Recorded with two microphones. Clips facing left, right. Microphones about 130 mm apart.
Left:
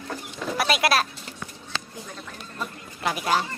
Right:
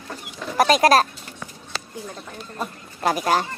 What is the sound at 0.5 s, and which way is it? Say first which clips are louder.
Speech: right 7 dB; 40° right (ahead or behind).